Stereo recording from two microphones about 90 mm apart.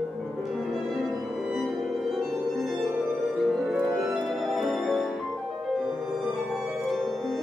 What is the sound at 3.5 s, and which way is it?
Music, centre (ahead or behind).